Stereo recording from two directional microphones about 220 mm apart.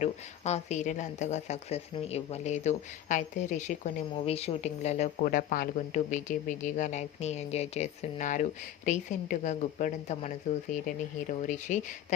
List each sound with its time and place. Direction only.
0.0 s speech: 30° left (ahead or behind)
11.4 s speech: 35° left (ahead or behind)